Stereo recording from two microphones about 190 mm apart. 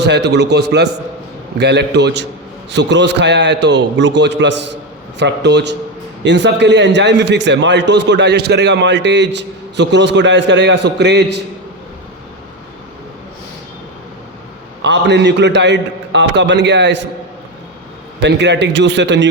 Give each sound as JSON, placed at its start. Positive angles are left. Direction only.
{"t": 0.0, "sound": "a man's voice", "side_deg": -65}
{"t": 14.8, "sound": "a man's voice", "side_deg": -65}
{"t": 18.2, "sound": "a man's voice", "side_deg": -65}